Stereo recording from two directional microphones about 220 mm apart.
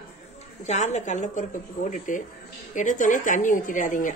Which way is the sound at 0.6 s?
30° left (ahead or behind).